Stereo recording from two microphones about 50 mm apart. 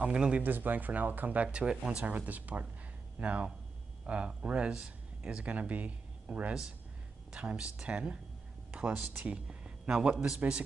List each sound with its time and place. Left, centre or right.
0.1 s speech: centre
0.4 s speech: right; by 2.0 s centre
2.0 s speech: right